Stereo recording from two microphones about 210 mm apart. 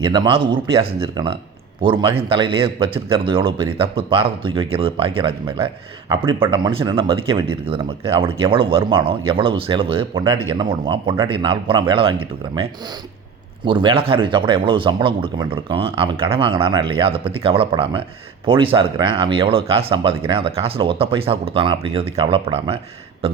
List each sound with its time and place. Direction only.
0.0 s speech: 20° right (ahead or behind)
13.7 s speech: 25° right (ahead or behind)